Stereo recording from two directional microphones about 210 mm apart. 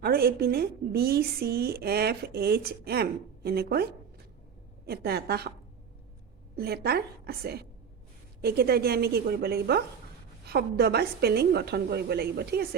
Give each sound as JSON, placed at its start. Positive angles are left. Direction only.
{"t": 0.0, "sound": "a woman's voice", "side_deg": -45}
{"t": 4.9, "sound": "a woman's voice", "side_deg": -50}
{"t": 6.6, "sound": "a woman's voice", "side_deg": -50}